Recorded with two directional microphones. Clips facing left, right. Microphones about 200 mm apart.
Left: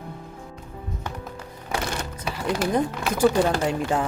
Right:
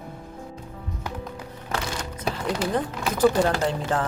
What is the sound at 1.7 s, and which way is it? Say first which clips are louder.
Music: left 2 dB; 10° left (ahead or behind).